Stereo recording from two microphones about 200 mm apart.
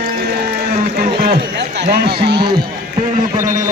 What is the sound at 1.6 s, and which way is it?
Run, 60° right (ahead or behind).